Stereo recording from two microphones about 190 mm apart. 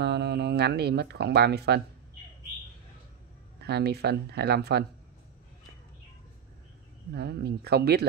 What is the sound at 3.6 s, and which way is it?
Speech, 60° right (ahead or behind).